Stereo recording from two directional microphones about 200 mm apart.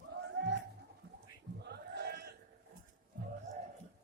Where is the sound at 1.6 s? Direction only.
55° right (ahead or behind).